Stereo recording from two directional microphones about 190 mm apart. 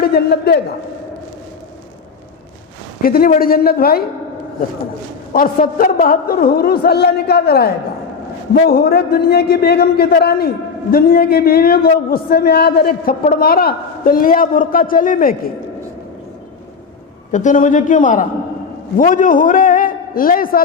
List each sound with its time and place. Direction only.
0.0 s a man's voice: 55° left (ahead or behind)
3.0 s a man's voice: 50° left (ahead or behind)
5.3 s a man's voice: 50° left (ahead or behind)
17.3 s a man's voice: 40° left (ahead or behind)